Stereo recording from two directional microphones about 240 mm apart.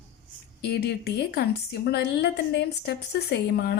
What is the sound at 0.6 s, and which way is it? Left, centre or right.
A woman's voice, left.